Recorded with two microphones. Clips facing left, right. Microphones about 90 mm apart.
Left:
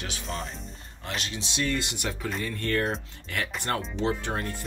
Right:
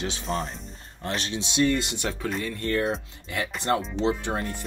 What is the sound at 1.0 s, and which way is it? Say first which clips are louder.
Speech: right 4 dB; 40° right (ahead or behind).